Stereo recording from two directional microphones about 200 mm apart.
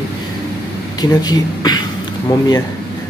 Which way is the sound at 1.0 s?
20° left (ahead or behind).